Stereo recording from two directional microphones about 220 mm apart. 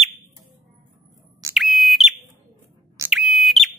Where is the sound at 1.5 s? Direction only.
Centre (ahead or behind).